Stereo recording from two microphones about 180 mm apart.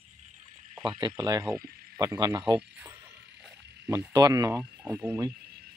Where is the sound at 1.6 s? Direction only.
55° right (ahead or behind).